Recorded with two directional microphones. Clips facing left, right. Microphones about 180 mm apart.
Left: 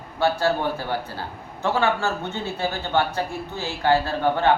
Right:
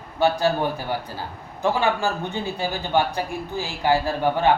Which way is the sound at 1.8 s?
15° right (ahead or behind).